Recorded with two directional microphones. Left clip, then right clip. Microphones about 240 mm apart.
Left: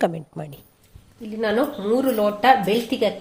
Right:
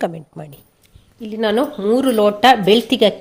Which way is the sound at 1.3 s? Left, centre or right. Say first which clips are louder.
Right 4 dB; right.